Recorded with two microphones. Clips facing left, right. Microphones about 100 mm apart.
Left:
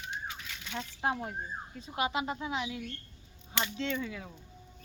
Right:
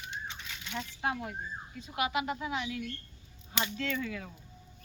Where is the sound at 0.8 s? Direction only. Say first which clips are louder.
Left 1 dB; 30° left (ahead or behind).